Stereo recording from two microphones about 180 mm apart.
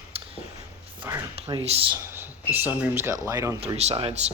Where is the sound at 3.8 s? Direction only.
35° right (ahead or behind).